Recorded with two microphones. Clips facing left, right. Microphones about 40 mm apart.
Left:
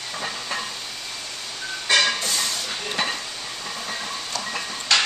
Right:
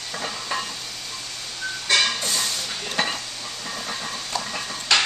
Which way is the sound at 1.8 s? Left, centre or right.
Centre.